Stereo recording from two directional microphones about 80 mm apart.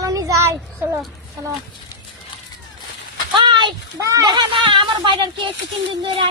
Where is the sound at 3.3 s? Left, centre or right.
Right.